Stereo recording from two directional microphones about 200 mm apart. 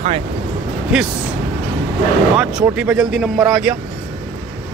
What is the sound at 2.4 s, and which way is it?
Speech, 5° right (ahead or behind).